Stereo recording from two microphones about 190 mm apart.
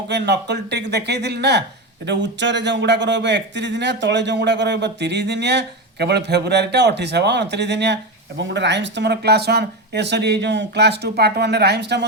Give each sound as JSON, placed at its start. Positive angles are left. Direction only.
{"t": 0.1, "sound": "a man's voice", "side_deg": -65}